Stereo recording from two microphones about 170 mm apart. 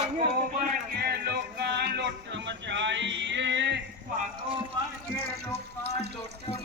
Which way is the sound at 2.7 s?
90° right.